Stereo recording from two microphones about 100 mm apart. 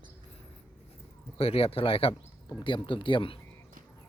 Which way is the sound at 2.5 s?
50° left (ahead or behind).